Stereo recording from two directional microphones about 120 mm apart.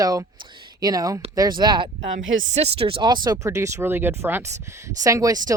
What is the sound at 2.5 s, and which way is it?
Speech, 55° right (ahead or behind).